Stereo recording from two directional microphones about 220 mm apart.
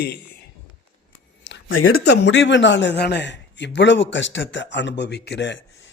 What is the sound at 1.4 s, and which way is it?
Speech, 60° left (ahead or behind).